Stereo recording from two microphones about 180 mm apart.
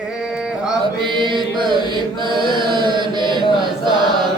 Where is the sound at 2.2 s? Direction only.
25° right (ahead or behind).